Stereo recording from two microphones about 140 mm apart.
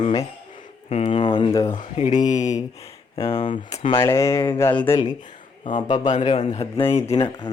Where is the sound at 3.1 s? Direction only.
35° left (ahead or behind).